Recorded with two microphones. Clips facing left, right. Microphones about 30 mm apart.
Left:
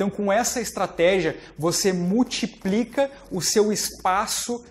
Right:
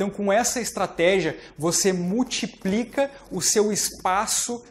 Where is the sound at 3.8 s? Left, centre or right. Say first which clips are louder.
Left 1 dB; centre.